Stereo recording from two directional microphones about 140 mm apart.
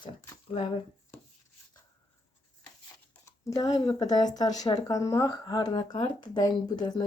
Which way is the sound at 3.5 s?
25° left (ahead or behind).